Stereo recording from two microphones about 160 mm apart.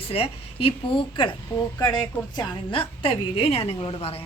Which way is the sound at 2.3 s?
35° left (ahead or behind).